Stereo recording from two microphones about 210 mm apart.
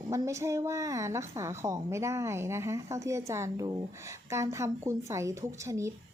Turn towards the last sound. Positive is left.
turn(degrees=-15)  # may be behind; listen again after turning